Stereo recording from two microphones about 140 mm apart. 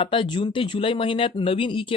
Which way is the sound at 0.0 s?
40° left (ahead or behind).